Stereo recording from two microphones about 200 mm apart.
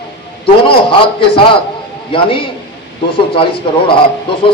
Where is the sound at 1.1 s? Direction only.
25° left (ahead or behind).